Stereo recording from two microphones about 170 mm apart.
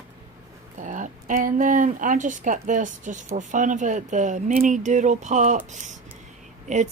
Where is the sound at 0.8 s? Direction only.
50° right (ahead or behind).